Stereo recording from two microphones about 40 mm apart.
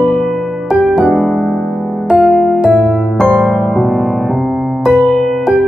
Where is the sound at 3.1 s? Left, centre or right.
Centre.